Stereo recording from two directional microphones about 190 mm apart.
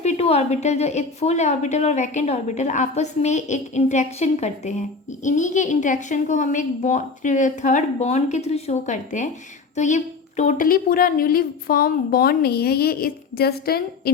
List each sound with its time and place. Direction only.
0.0 s a woman's voice: 35° left (ahead or behind); by 14.1 s 55° left (ahead or behind)